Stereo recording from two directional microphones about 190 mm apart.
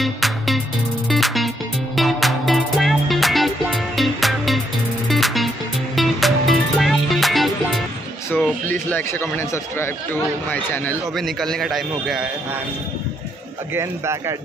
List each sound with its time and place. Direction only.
0.0 s music: centre (ahead or behind)
8.6 s speech: 10° left (ahead or behind)
13.7 s speech: 15° right (ahead or behind)